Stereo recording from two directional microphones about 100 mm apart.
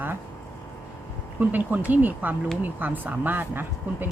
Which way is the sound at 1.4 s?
15° right (ahead or behind).